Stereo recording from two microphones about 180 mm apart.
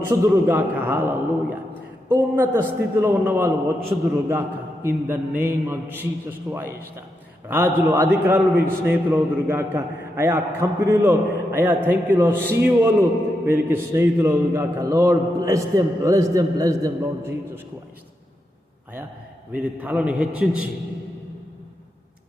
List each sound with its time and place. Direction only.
0.0 s a man's voice: 10° right (ahead or behind)
19.5 s a man's voice: 10° right (ahead or behind)